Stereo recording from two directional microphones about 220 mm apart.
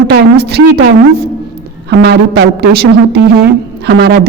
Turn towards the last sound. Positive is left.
turn(degrees=-50)  # may be behind; listen again after turning